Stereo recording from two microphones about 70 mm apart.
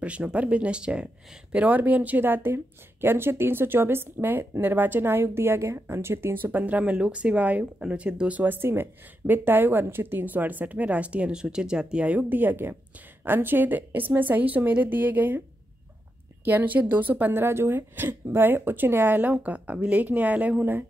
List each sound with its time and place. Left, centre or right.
0.0 s speech: centre
16.4 s speech: right